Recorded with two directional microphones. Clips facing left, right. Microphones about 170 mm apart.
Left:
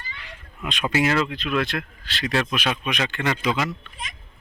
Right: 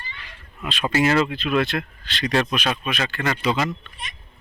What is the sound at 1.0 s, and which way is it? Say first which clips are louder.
Speech: right 4 dB; 35° right (ahead or behind).